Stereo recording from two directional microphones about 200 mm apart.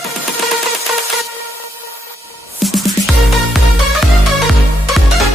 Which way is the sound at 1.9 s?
15° right (ahead or behind).